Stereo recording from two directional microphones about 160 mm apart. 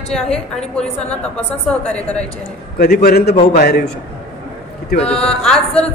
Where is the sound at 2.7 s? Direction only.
75° left (ahead or behind).